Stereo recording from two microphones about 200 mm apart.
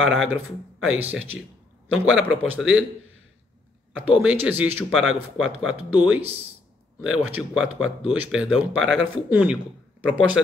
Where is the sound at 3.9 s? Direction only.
10° right (ahead or behind).